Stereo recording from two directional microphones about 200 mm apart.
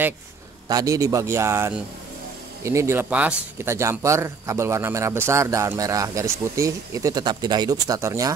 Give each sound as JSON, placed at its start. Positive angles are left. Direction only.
{"t": 0.7, "sound": "speech", "side_deg": -15}